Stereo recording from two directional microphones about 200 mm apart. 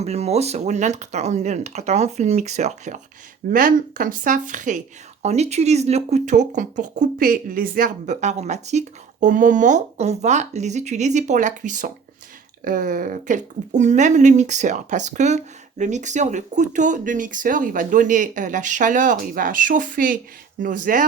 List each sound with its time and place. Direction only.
0.0 s speech: 35° right (ahead or behind)